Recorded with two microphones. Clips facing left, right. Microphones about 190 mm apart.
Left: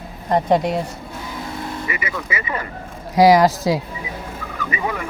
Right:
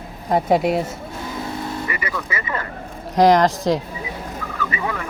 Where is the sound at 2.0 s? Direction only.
10° left (ahead or behind).